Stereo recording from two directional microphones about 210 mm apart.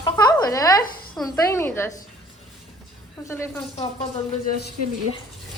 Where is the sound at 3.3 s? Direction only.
10° left (ahead or behind).